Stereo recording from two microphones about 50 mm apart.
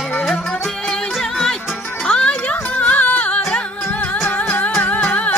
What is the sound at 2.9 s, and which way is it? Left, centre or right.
Music, left.